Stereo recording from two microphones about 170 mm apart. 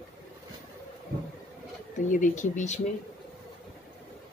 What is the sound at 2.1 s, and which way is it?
Speech, 50° left (ahead or behind).